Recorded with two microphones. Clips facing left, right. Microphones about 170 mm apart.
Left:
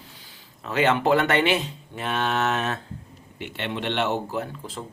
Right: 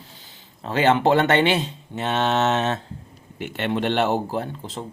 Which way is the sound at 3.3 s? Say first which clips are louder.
Right 6 dB; 45° right (ahead or behind).